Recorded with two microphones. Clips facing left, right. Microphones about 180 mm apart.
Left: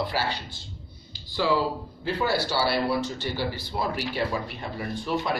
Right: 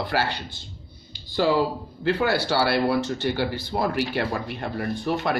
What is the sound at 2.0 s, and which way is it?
Speech, 65° right (ahead or behind).